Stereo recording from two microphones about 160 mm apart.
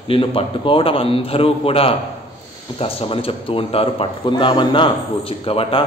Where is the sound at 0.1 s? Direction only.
35° left (ahead or behind).